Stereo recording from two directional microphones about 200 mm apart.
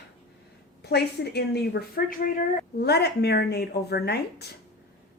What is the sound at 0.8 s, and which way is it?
A woman's voice, 55° left (ahead or behind).